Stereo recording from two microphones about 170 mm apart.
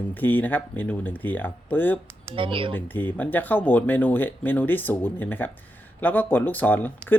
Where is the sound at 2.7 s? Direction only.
10° left (ahead or behind).